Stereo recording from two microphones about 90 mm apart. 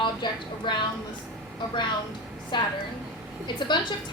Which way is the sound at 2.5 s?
60° left (ahead or behind).